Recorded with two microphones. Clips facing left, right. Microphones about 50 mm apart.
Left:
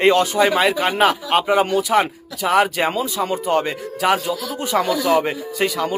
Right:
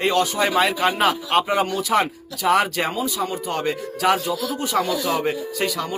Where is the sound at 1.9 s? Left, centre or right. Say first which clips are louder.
Left 2 dB; centre.